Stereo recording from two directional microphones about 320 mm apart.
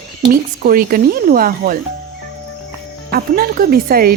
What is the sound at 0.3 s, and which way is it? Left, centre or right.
Speech, right.